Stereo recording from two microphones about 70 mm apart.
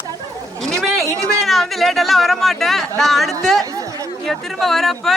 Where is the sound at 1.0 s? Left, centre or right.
Right.